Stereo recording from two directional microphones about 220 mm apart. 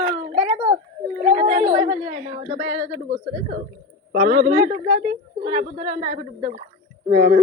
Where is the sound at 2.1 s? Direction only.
30° right (ahead or behind).